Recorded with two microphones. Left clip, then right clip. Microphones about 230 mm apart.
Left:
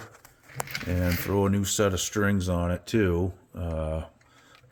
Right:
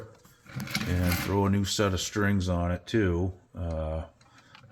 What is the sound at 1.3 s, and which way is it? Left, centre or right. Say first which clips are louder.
Speech: left 3 dB; left.